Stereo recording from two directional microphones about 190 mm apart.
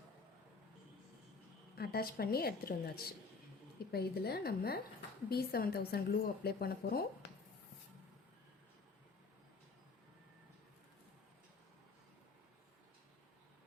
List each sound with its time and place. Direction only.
1.7 s a woman's voice: 55° left (ahead or behind)